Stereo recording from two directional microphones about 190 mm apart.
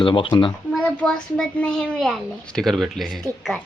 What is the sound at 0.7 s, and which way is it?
A child's voice, 5° left (ahead or behind).